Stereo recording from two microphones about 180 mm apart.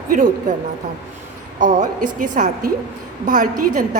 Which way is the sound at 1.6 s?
45° right (ahead or behind).